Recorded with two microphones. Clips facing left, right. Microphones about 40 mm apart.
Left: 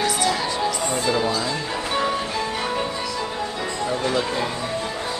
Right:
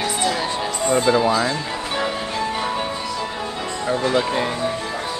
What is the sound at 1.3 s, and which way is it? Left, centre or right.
Speech, right.